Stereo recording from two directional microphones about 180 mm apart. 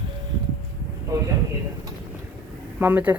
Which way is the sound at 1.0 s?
15° right (ahead or behind).